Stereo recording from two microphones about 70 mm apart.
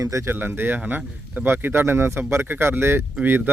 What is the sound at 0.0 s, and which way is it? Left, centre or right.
Speech, right.